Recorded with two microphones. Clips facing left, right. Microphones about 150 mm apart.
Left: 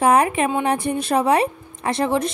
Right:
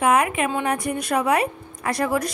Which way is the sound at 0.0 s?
30° left (ahead or behind).